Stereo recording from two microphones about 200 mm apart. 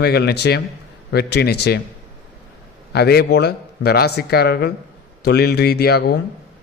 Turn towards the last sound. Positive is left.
turn(degrees=55)  # may be behind; listen again after turning